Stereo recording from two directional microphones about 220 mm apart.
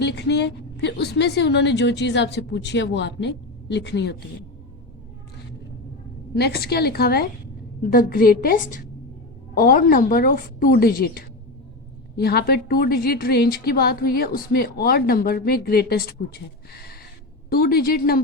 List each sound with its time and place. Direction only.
0.0 s a woman's voice: 50° left (ahead or behind)
6.3 s a woman's voice: 45° left (ahead or behind)
17.5 s a woman's voice: 40° left (ahead or behind)